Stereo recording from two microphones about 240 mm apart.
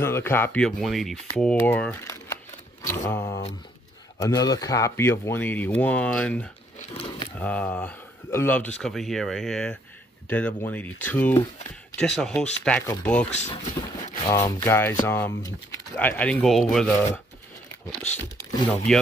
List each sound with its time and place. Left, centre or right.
0.0 s speech: centre
6.8 s a sound: left
7.3 s speech: centre
13.6 s a sound: left
14.3 s speech: centre
18.4 s speech: centre